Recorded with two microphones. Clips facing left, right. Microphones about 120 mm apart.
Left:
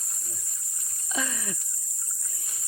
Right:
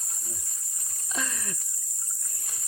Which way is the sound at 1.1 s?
Centre (ahead or behind).